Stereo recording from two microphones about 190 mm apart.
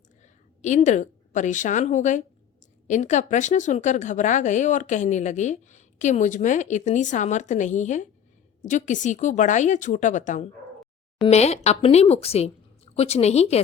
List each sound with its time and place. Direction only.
0.2 s a woman's voice: 40° left (ahead or behind)